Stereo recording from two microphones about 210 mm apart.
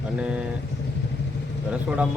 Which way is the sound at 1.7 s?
5° right (ahead or behind).